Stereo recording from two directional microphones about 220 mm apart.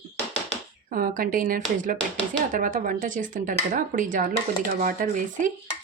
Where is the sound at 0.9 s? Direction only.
40° right (ahead or behind).